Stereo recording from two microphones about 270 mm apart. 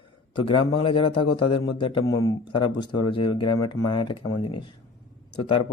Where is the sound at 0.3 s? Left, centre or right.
Centre.